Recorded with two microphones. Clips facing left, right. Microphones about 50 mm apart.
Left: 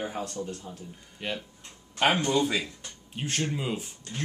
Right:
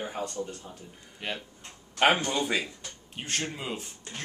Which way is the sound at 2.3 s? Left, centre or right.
Centre.